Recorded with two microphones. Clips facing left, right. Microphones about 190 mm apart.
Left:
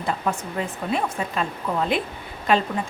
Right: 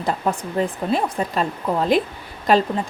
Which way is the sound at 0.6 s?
35° right (ahead or behind).